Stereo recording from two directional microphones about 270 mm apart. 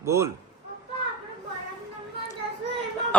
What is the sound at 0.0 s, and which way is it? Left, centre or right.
Speech, centre.